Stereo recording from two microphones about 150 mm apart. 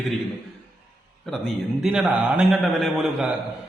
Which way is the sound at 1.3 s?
Centre (ahead or behind).